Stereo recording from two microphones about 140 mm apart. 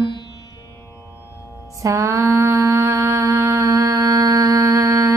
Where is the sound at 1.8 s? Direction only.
25° right (ahead or behind).